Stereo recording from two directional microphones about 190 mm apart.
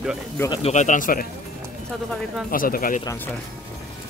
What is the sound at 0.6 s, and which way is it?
Speech, 40° left (ahead or behind).